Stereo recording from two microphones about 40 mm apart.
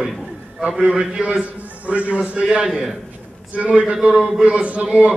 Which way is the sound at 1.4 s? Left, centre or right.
Right.